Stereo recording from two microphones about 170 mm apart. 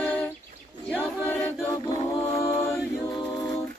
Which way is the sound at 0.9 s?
10° left (ahead or behind).